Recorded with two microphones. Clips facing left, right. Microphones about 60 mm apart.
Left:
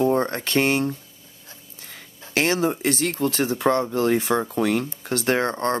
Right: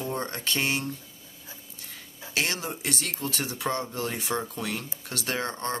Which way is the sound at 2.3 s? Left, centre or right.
Left.